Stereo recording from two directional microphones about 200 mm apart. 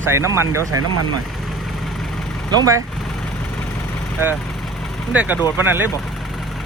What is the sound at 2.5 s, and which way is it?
Speech, 15° right (ahead or behind).